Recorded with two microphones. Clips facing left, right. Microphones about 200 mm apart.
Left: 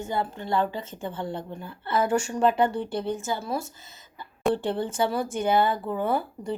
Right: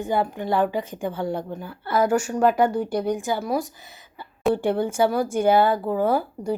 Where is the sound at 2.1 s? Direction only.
5° right (ahead or behind).